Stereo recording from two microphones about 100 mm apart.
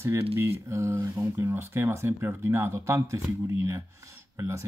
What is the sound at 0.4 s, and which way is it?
Speech, 30° right (ahead or behind).